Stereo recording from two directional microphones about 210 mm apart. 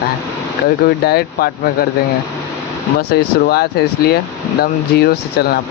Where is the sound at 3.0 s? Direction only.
50° left (ahead or behind).